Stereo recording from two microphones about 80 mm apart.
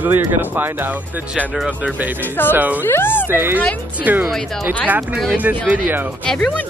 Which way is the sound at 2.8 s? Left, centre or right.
Left.